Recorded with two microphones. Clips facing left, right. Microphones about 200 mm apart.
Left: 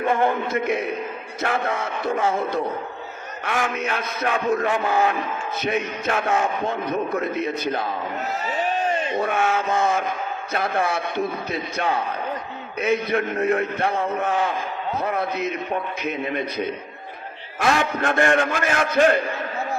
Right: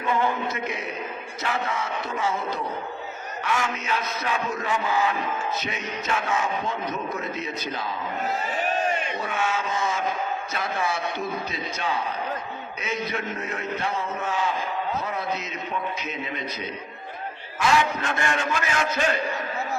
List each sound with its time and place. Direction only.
0.0 s a man's voice: 55° left (ahead or behind)
9.1 s a man's voice: 55° left (ahead or behind)